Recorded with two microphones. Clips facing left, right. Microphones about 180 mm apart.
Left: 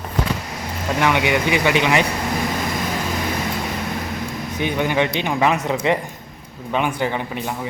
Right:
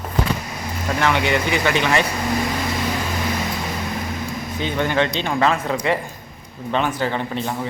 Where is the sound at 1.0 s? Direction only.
15° left (ahead or behind).